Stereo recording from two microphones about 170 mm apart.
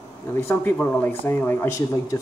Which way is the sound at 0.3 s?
15° left (ahead or behind).